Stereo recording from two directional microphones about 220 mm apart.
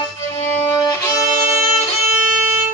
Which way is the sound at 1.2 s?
10° right (ahead or behind).